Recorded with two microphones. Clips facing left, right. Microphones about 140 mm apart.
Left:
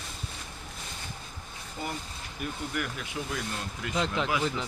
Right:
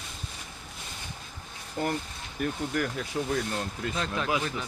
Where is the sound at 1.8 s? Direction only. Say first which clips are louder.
Right 7 dB; 60° right (ahead or behind).